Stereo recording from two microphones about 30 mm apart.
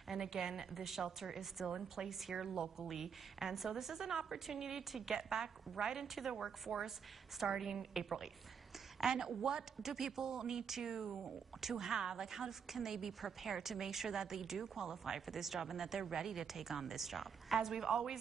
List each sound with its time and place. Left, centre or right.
0.1 s a woman's voice: centre
1.7 s a woman's voice: right
2.0 s a woman's voice: centre; by 9.7 s right
9.8 s a woman's voice: centre